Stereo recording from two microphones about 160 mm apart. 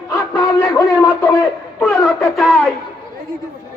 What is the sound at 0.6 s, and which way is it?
Speech, 25° left (ahead or behind).